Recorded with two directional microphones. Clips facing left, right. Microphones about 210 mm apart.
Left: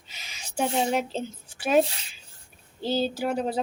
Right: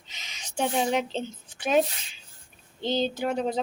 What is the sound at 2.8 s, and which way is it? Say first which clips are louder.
Speech: even; 5° left (ahead or behind).